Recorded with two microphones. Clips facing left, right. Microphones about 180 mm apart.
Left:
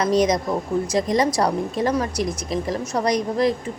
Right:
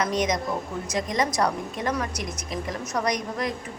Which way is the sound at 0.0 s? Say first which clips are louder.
Left 6 dB; 35° left (ahead or behind).